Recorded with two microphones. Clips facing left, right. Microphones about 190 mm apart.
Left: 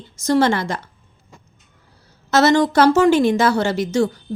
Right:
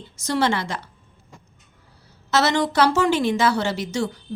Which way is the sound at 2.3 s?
45° left (ahead or behind).